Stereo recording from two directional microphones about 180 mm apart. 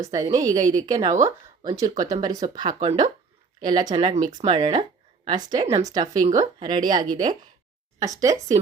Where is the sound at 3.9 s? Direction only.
40° right (ahead or behind).